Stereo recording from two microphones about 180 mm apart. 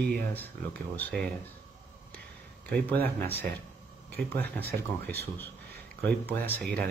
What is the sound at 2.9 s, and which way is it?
Speech, 60° right (ahead or behind).